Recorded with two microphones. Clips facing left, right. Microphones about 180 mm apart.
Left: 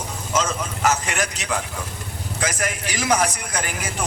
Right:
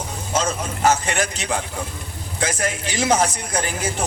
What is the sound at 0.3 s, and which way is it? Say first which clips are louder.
A man's voice: right 1 dB; 30° right (ahead or behind).